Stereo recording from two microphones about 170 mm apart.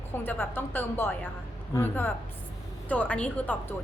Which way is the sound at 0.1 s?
10° left (ahead or behind).